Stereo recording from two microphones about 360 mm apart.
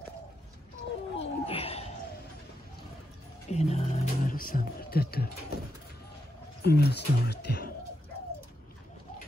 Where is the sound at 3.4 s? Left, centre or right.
Centre.